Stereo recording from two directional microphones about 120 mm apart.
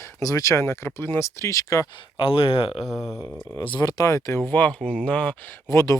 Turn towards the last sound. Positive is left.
turn(degrees=25)  # may be behind; listen again after turning